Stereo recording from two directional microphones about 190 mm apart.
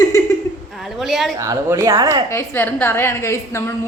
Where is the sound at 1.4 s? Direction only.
15° right (ahead or behind).